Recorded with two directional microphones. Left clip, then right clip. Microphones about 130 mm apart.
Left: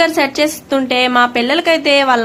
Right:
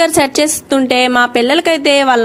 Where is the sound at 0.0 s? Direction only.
60° right (ahead or behind).